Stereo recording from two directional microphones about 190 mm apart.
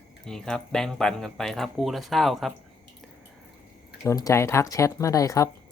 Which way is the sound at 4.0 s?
15° left (ahead or behind).